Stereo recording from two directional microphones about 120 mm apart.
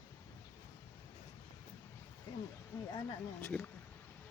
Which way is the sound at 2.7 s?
30° left (ahead or behind).